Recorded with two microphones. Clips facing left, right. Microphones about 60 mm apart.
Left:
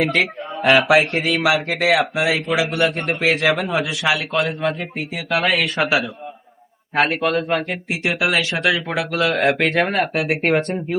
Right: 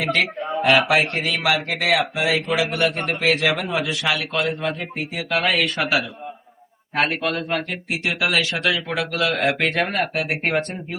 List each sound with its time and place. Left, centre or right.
0.0 s speech: centre
8.4 s speech: left
8.6 s speech: centre